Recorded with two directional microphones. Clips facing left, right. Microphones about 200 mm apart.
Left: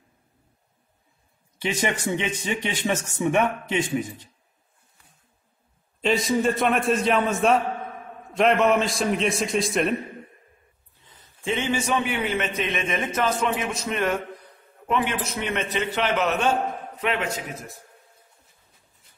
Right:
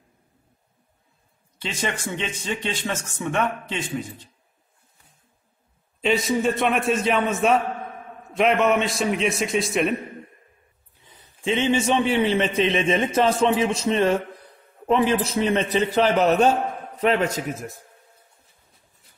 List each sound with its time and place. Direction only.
1.6 s speech: 15° left (ahead or behind)
5.9 s a man's voice: centre (ahead or behind)
11.1 s a man's voice: 15° right (ahead or behind); by 17.3 s 40° right (ahead or behind)